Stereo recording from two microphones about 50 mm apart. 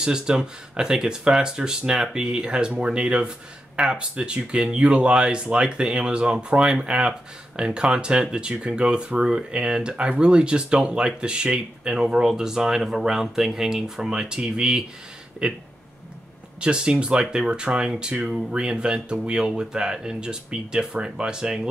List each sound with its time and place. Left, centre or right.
0.0 s speech: centre
16.6 s speech: centre